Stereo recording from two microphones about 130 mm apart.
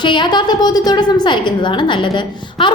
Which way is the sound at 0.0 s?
35° left (ahead or behind).